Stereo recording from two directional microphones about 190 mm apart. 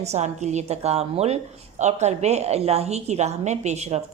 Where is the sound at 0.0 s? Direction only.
35° right (ahead or behind).